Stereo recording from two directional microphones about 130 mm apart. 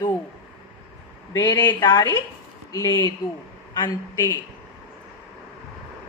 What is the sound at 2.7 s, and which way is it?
Mantra, 30° left (ahead or behind).